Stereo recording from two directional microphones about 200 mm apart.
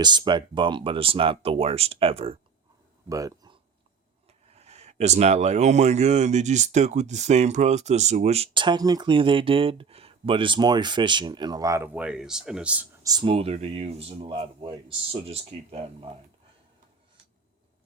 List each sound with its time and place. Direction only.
0.0 s speech: 20° right (ahead or behind)
3.1 s speech: 15° right (ahead or behind)
4.3 s speech: 30° right (ahead or behind); by 13.1 s 5° right (ahead or behind)
13.1 s speech: 25° right (ahead or behind)